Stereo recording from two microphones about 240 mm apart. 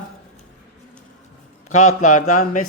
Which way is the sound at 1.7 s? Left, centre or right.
Left.